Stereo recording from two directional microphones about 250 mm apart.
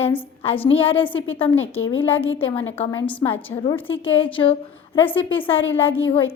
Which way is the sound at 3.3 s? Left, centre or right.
Centre.